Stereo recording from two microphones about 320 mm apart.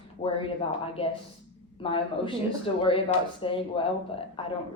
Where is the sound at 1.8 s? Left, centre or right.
Centre.